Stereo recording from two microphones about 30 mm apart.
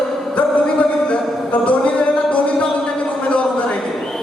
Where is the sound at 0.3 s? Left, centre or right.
Left.